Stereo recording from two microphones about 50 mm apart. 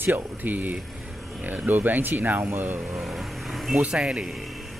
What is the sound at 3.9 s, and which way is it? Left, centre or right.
Speech, centre.